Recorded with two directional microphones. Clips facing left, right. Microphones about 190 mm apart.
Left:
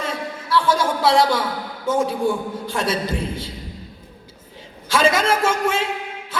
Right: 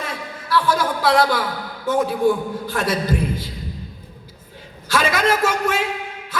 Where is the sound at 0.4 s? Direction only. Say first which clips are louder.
Even; 25° left (ahead or behind).